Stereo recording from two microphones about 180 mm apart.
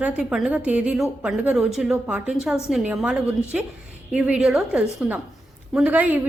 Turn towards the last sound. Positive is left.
turn(degrees=-10)  # may be behind; listen again after turning